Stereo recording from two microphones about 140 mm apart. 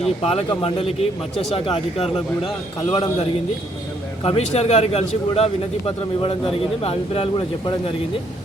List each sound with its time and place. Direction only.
0.0 s a man's voice: 45° left (ahead or behind)